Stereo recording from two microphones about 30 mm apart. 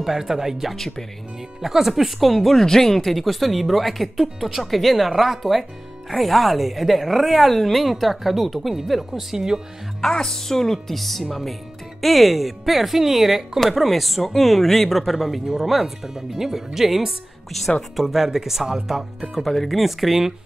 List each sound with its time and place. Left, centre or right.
0.0 s speech: centre
0.7 s speech: centre
1.6 s speech: centre
2.6 s speech: centre
3.1 s speech: centre
9.1 s speech: centre
10.1 s speech: centre
17.5 s speech: centre
19.5 s speech: centre
19.8 s speech: centre